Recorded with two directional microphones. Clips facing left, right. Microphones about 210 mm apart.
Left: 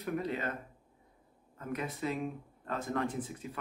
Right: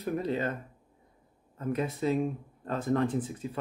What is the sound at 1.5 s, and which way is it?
Speech, 30° right (ahead or behind).